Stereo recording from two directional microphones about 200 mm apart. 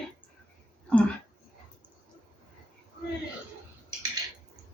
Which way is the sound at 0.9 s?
5° left (ahead or behind).